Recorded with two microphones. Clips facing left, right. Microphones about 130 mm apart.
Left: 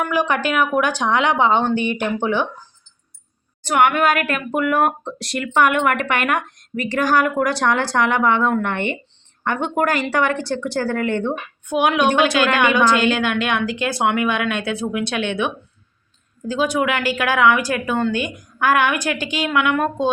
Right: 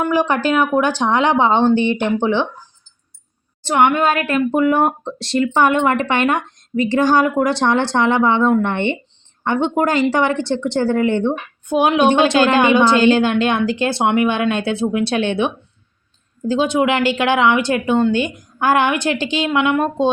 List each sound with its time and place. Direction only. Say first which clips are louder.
0.0 s speech: right 3 dB; 30° right (ahead or behind)
3.6 s speech: right 2 dB; 30° right (ahead or behind)